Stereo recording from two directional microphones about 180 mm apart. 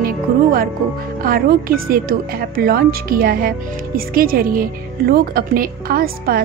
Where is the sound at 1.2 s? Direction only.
55° right (ahead or behind).